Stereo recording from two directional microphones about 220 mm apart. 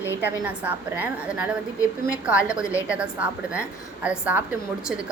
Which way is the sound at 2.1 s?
5° right (ahead or behind).